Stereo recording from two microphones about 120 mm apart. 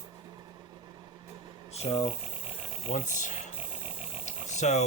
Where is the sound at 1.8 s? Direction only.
60° left (ahead or behind).